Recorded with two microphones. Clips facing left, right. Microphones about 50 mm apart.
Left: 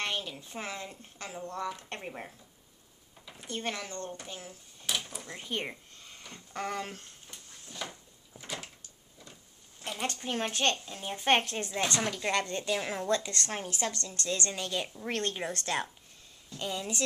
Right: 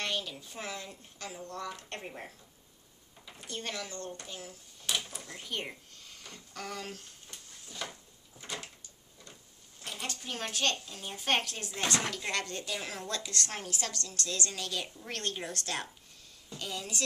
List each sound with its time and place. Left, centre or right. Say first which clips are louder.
0.0 s a woman's voice: left 1 dB; left
3.4 s a woman's voice: left 3 dB; left
4.8 s a sound: even; centre
5.2 s a woman's voice: left 3 dB; left
5.9 s a sound: left 1 dB; left
6.3 s a child's voice: left 6 dB; left
7.8 s a sound: left 1 dB; centre
8.4 s door: left 1 dB; centre
9.8 s a child's voice: left 5 dB; left; by 17.0 s centre